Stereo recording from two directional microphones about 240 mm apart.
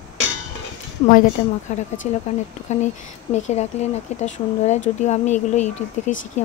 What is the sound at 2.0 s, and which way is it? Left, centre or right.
Speech, left.